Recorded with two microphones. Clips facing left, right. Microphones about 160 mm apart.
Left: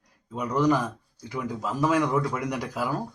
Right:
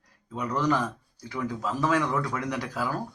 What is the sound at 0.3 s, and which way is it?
Speech, 10° left (ahead or behind).